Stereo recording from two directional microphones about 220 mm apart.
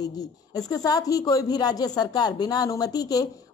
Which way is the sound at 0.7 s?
15° left (ahead or behind).